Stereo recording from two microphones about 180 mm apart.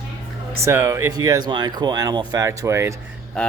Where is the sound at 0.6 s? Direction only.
15° right (ahead or behind).